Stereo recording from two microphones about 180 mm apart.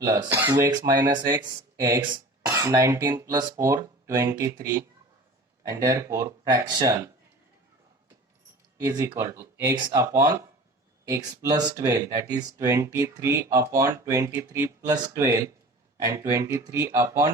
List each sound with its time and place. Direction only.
0.0 s speech: 20° right (ahead or behind)
8.8 s speech: 20° right (ahead or behind)
11.8 s speech: 15° right (ahead or behind)